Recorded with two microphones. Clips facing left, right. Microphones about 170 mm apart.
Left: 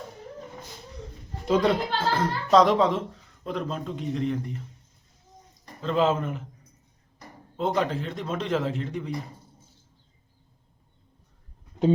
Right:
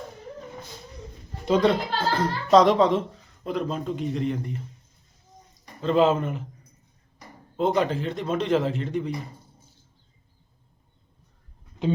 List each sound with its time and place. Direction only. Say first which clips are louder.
1.5 s a man's voice: right 2 dB; 5° left (ahead or behind)
5.8 s a man's voice: right 3 dB; centre (ahead or behind)
7.5 s a man's voice: right 3 dB; centre (ahead or behind)